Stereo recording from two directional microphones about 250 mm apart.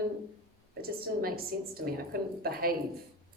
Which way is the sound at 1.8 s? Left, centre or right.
Right.